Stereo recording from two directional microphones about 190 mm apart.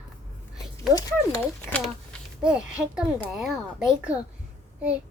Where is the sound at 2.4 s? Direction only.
5° right (ahead or behind).